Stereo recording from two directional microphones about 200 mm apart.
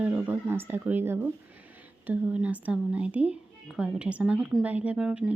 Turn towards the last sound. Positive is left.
turn(degrees=-5)  # may be behind; listen again after turning